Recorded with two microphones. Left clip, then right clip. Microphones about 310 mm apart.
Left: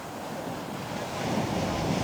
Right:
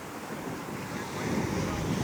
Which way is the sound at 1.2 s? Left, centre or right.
Left.